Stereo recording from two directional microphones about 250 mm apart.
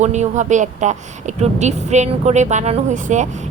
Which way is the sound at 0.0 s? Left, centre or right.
Right.